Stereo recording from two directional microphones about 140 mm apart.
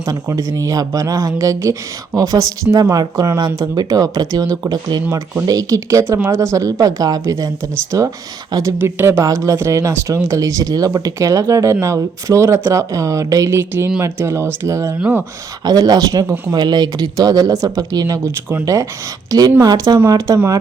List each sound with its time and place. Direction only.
0.0 s speech: 20° right (ahead or behind)
5.1 s speech: 15° right (ahead or behind)